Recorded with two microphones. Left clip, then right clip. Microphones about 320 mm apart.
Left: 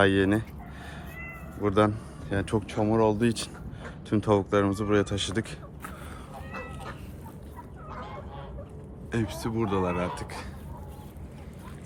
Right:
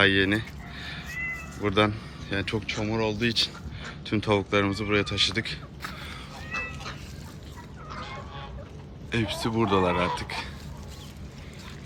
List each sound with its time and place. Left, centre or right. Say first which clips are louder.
0.0 s a sound: right 1 dB; centre
1.6 s speech: even; centre
9.1 s speech: right 4 dB; centre